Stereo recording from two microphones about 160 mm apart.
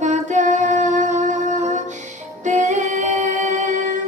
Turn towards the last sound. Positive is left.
turn(degrees=-50)  # may be behind; listen again after turning